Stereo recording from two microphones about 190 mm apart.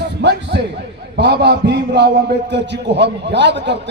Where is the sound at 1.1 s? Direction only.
65° right (ahead or behind).